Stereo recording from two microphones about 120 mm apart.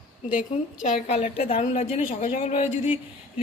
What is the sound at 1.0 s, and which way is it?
A woman's voice, 65° left (ahead or behind).